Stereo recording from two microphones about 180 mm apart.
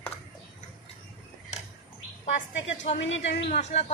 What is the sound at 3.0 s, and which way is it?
Speech, 90° left.